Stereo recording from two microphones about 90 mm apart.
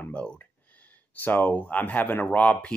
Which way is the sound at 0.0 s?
15° left (ahead or behind).